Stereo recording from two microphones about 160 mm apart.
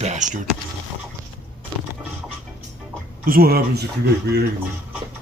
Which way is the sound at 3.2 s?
65° right (ahead or behind).